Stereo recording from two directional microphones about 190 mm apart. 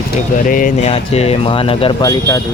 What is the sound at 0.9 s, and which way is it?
Speech, 35° left (ahead or behind).